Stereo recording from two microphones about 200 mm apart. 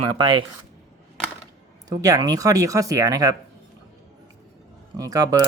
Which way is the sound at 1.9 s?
15° right (ahead or behind).